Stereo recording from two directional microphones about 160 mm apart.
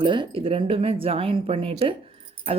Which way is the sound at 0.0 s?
30° right (ahead or behind).